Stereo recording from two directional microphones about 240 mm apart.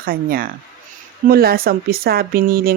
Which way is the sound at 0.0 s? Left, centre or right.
Right.